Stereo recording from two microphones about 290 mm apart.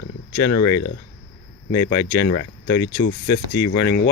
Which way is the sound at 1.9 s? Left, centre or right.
Centre.